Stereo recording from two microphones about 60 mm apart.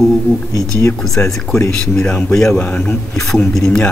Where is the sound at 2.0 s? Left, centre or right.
Centre.